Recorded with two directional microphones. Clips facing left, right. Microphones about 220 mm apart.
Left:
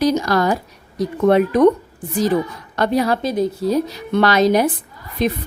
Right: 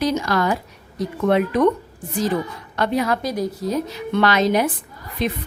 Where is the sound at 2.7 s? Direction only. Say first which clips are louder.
Left 3 dB; 40° left (ahead or behind).